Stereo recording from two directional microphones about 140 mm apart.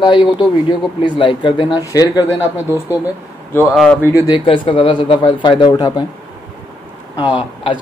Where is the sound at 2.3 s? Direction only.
10° right (ahead or behind).